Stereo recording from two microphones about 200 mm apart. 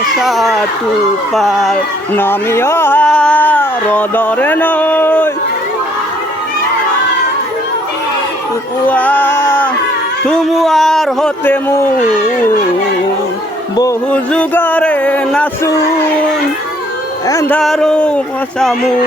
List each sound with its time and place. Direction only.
0.2 s speech: centre (ahead or behind)
8.9 s a sound: 10° left (ahead or behind)
10.2 s speech: centre (ahead or behind)
14.1 s music: 10° left (ahead or behind)
17.2 s speech: 15° left (ahead or behind)